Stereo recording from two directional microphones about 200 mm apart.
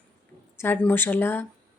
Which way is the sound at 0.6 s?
10° left (ahead or behind).